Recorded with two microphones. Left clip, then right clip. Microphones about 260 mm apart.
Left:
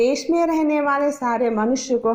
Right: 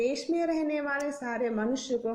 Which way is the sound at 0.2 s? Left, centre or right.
Left.